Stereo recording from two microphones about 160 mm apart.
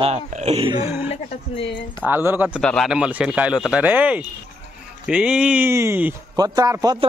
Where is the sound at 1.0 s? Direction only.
40° left (ahead or behind).